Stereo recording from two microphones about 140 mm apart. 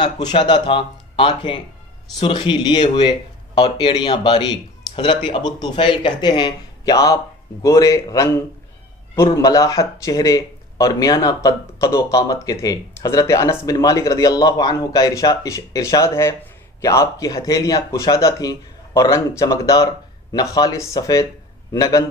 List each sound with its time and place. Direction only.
0.0 s speech: 30° left (ahead or behind)